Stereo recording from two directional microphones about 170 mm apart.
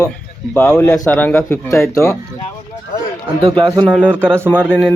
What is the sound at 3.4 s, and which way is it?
Speech, 25° right (ahead or behind).